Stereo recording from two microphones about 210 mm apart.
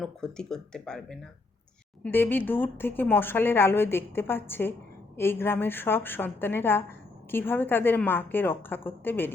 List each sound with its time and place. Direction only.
0.0 s a woman's voice: 5° left (ahead or behind)